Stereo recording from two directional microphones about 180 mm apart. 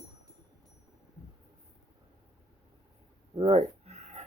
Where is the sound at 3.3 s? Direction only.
35° right (ahead or behind).